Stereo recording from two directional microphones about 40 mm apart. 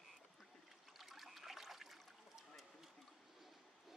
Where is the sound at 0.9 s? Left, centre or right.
Centre.